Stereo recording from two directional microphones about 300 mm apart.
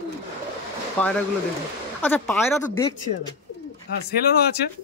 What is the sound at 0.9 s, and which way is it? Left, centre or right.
A man's voice, centre.